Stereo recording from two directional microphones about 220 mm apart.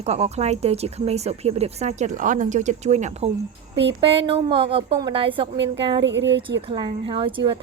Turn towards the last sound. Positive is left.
turn(degrees=-20)  # may be behind; listen again after turning